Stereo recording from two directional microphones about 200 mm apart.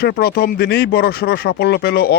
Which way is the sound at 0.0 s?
50° left (ahead or behind).